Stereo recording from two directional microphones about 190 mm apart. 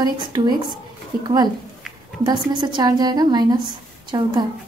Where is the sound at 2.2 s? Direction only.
25° right (ahead or behind).